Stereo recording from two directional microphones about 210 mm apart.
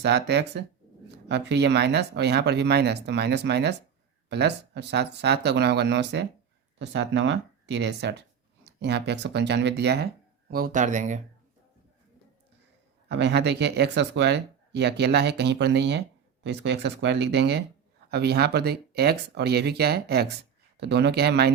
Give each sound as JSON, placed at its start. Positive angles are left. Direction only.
{"t": 0.0, "sound": "speech", "side_deg": -55}
{"t": 10.5, "sound": "speech", "side_deg": -40}
{"t": 13.1, "sound": "speech", "side_deg": -55}